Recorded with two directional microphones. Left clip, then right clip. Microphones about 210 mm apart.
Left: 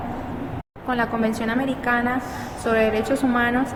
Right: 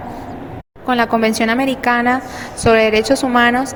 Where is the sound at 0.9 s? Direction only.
35° right (ahead or behind).